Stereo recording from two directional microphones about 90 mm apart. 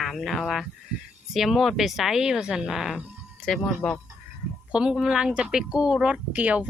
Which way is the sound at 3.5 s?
10° left (ahead or behind).